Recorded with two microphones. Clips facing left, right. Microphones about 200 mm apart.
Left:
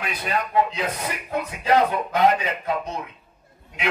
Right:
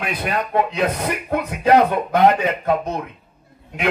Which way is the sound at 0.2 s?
60° right (ahead or behind).